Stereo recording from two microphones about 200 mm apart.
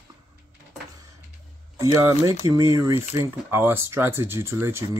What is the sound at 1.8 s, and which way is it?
Speech, 15° right (ahead or behind).